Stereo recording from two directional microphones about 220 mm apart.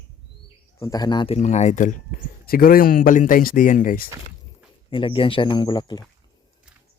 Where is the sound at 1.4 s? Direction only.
30° left (ahead or behind).